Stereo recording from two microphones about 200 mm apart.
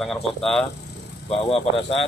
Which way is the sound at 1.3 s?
30° left (ahead or behind).